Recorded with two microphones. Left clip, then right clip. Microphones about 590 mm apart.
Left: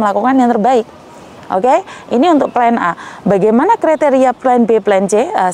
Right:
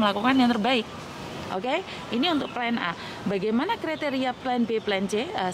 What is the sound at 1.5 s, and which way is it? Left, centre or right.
A woman's voice, left.